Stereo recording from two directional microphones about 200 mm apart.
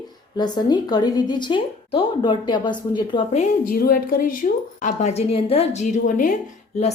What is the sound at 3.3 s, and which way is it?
A woman's voice, 45° left (ahead or behind).